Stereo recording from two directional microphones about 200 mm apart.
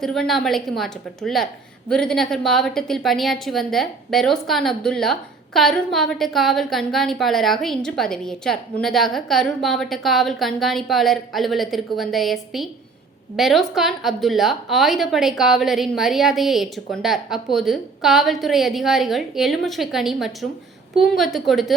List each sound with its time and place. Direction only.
0.0 s a woman's voice: centre (ahead or behind)